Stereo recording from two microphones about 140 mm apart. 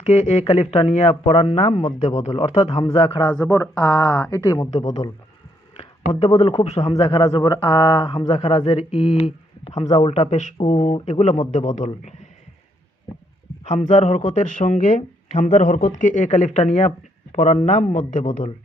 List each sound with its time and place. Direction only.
0.0 s speech: 55° left (ahead or behind)
3.4 s speech: 20° left (ahead or behind)
5.7 s speech: 45° left (ahead or behind)
7.3 s speech: 30° left (ahead or behind); by 9.7 s 45° left (ahead or behind)
9.7 s speech: 35° left (ahead or behind)
10.1 s speech: 50° left (ahead or behind)
13.7 s speech: 60° left (ahead or behind)
18.1 s speech: 65° left (ahead or behind)